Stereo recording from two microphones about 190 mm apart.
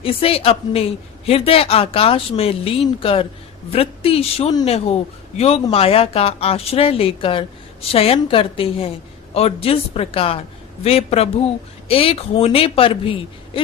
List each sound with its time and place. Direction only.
0.0 s a man's voice: 30° left (ahead or behind)